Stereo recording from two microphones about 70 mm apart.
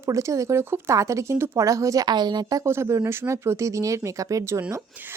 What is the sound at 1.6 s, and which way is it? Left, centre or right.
Speech, right.